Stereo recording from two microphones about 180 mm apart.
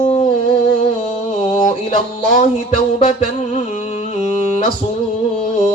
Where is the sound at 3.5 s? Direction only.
40° left (ahead or behind).